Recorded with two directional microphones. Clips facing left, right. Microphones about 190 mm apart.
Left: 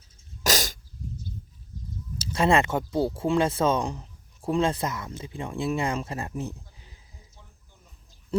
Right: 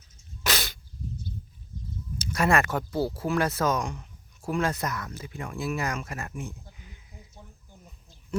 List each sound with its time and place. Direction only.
0.4 s dog: 40° left (ahead or behind)
2.2 s speech: 25° left (ahead or behind)